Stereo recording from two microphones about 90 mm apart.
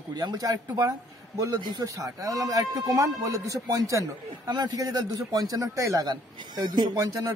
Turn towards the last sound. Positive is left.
turn(degrees=-45)  # may be behind; listen again after turning